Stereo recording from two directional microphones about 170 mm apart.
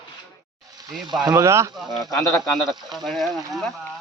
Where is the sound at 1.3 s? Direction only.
15° right (ahead or behind).